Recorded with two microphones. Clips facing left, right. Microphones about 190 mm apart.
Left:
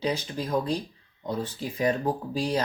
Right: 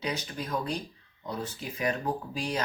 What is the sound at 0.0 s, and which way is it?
Speech, 30° left (ahead or behind).